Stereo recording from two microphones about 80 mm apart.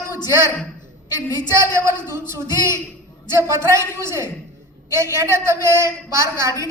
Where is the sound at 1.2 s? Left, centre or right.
Left.